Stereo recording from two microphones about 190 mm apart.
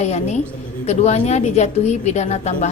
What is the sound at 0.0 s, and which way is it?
A woman's voice, 35° left (ahead or behind).